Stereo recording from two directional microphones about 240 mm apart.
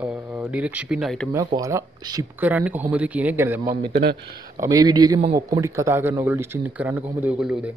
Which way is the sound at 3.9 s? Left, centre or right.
Right.